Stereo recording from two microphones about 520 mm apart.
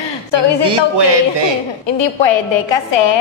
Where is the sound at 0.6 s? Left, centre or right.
Right.